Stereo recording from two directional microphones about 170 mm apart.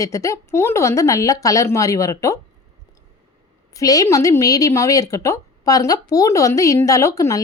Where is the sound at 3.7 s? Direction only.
20° left (ahead or behind).